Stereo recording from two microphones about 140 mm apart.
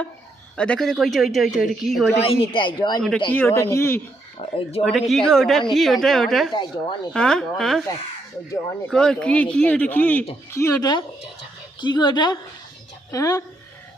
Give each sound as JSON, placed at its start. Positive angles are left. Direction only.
{"t": 0.5, "sound": "speech", "side_deg": 5}
{"t": 2.1, "sound": "a man's voice", "side_deg": 40}
{"t": 3.3, "sound": "speech", "side_deg": 20}
{"t": 4.4, "sound": "speech", "side_deg": 45}
{"t": 4.8, "sound": "speech", "side_deg": 0}
{"t": 6.5, "sound": "a man's voice", "side_deg": 35}
{"t": 7.1, "sound": "speech", "side_deg": 5}
{"t": 8.9, "sound": "a man's voice", "side_deg": 5}